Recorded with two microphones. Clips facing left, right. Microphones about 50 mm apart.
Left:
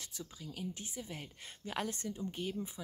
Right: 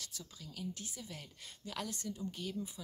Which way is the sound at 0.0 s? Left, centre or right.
Left.